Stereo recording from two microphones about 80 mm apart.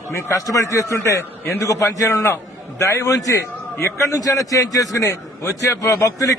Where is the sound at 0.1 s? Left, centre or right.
Left.